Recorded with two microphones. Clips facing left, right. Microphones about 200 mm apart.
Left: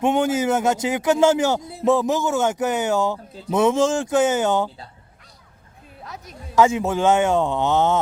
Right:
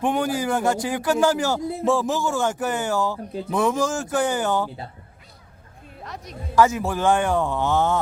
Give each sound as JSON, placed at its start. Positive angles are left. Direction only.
{"t": 0.0, "sound": "music", "side_deg": 20}
{"t": 6.0, "sound": "music", "side_deg": 0}
{"t": 6.6, "sound": "music", "side_deg": 25}